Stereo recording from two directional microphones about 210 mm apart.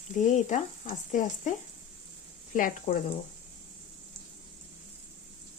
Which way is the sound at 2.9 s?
25° left (ahead or behind).